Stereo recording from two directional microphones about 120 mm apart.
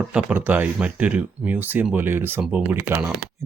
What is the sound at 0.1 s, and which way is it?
Speech, 10° right (ahead or behind).